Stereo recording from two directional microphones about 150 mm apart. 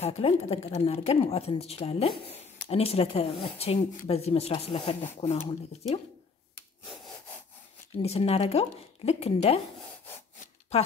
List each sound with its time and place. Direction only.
0.0 s a woman's voice: 40° left (ahead or behind)
8.0 s a woman's voice: 45° left (ahead or behind)
10.7 s a woman's voice: 45° left (ahead or behind)